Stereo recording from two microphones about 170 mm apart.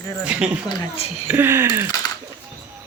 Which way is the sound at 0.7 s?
25° left (ahead or behind).